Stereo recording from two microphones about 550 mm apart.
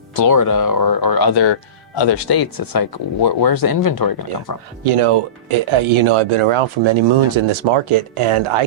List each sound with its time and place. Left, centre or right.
0.3 s speech: left
4.8 s speech: right